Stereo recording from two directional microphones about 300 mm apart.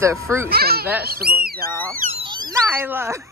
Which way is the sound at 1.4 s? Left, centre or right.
Right.